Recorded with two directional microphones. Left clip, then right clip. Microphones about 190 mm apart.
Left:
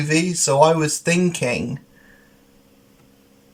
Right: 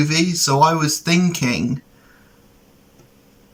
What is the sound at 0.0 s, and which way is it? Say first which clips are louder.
Speech: right 1 dB; 15° left (ahead or behind).